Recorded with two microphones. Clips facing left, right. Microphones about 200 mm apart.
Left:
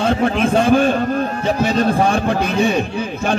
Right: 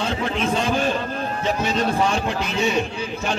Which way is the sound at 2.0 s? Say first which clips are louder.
Left 6 dB; 55° left (ahead or behind).